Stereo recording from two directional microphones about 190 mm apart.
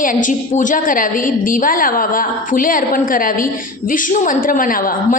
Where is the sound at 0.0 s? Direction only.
45° left (ahead or behind).